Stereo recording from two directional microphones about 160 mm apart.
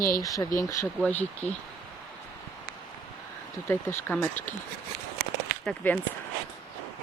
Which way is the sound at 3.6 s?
15° left (ahead or behind).